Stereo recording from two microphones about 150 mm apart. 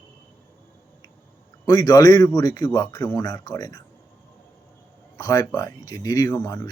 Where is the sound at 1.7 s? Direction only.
25° left (ahead or behind).